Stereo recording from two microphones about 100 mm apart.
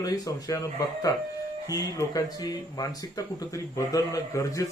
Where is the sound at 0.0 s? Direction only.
35° left (ahead or behind).